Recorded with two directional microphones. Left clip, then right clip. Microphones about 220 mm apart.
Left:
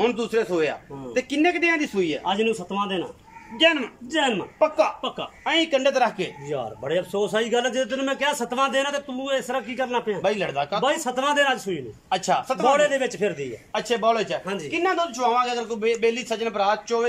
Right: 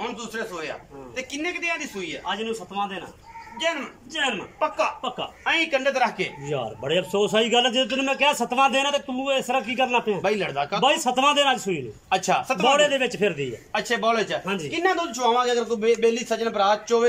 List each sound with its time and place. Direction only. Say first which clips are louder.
0.0 s a man's voice: left 8 dB; 40° left (ahead or behind); by 6.3 s 10° left (ahead or behind)
6.5 s a man's voice: right 1 dB; 5° right (ahead or behind)
10.2 s speech: even; 10° left (ahead or behind)
10.8 s a man's voice: right 5 dB; 5° right (ahead or behind)
12.1 s a man's voice: right 1 dB; 5° left (ahead or behind)
13.7 s speech: left 1 dB; 10° left (ahead or behind)
14.4 s a man's voice: right 2 dB; 5° right (ahead or behind)
14.7 s a man's voice: left 1 dB; 5° left (ahead or behind)